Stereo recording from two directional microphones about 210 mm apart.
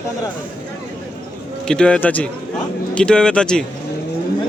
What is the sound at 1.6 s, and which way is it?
Speech, 5° left (ahead or behind).